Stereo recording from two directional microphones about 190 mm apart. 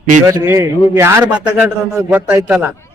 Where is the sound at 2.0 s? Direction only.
15° right (ahead or behind).